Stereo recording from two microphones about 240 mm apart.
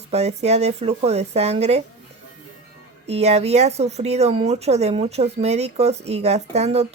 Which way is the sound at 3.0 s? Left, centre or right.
Right.